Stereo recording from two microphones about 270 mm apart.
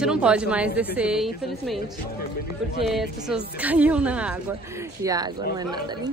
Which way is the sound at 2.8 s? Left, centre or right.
Centre.